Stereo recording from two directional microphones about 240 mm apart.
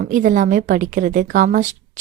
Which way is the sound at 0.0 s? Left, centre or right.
Right.